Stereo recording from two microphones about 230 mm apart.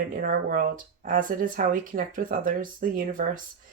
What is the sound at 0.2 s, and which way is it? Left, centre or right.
Speech, right.